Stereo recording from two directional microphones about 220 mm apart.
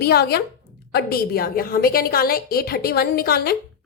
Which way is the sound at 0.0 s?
45° left (ahead or behind).